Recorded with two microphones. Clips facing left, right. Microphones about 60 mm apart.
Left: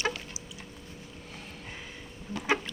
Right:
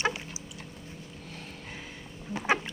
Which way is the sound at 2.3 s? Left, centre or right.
Right.